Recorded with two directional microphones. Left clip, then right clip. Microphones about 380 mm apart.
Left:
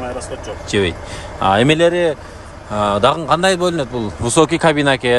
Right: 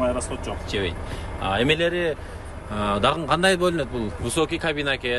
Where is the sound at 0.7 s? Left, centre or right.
Centre.